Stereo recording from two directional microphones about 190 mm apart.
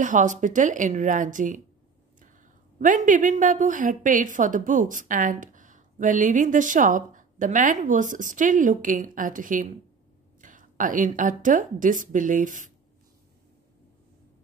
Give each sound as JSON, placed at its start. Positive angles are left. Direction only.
{"t": 0.0, "sound": "speech", "side_deg": -40}
{"t": 2.8, "sound": "a woman's voice", "side_deg": -40}